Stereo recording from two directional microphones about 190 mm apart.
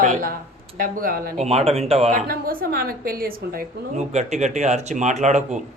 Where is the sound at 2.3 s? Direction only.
50° right (ahead or behind).